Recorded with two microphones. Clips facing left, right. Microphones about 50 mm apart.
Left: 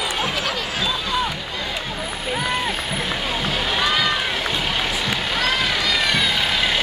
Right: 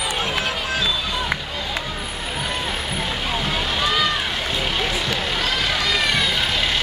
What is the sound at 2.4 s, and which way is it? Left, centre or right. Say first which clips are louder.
Rowboat: left 2 dB; centre.